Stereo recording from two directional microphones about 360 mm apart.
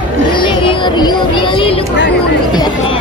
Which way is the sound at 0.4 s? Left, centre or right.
Centre.